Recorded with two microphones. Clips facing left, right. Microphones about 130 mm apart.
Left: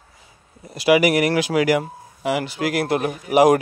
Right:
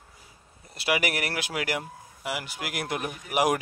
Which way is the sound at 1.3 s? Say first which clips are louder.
Left 12 dB; 90° left.